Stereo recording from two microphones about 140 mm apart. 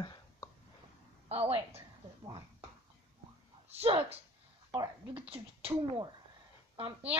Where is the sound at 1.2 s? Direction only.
45° right (ahead or behind).